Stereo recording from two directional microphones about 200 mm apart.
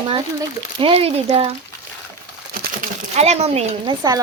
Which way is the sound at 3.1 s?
30° right (ahead or behind).